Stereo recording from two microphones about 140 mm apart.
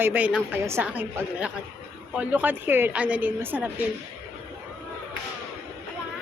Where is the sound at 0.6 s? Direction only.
20° right (ahead or behind).